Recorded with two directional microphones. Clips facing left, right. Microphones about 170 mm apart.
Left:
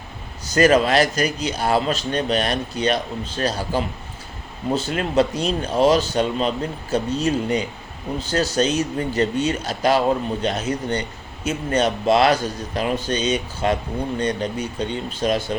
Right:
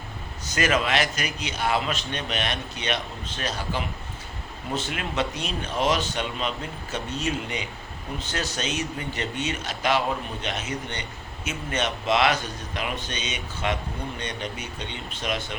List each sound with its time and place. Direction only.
0.5 s a man's voice: 35° left (ahead or behind)